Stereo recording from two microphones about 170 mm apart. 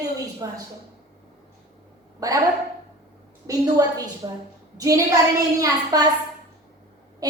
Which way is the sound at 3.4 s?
20° right (ahead or behind).